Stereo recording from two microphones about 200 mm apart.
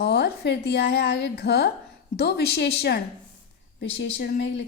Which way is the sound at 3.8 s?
50° left (ahead or behind).